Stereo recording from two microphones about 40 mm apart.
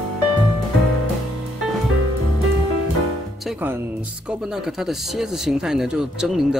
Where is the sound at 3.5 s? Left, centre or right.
Right.